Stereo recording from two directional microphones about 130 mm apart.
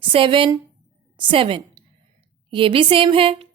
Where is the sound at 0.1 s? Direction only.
40° right (ahead or behind).